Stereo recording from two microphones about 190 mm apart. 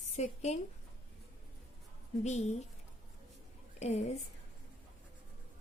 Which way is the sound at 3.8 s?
35° left (ahead or behind).